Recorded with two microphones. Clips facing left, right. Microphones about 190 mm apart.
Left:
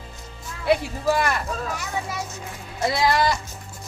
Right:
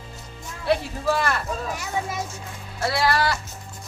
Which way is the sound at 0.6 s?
15° left (ahead or behind).